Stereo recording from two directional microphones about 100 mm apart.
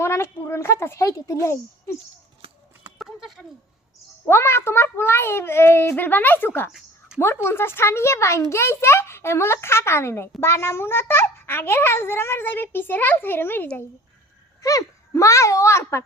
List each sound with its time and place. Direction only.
0.0 s a child's voice: 25° left (ahead or behind)
3.0 s a sound: centre (ahead or behind)
4.3 s a child's voice: 25° left (ahead or behind)
14.6 s a child's voice: 35° left (ahead or behind)